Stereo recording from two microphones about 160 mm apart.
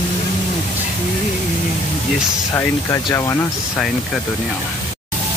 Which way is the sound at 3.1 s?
20° left (ahead or behind).